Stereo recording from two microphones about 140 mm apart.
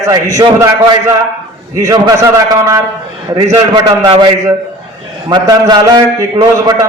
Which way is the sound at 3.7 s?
35° right (ahead or behind).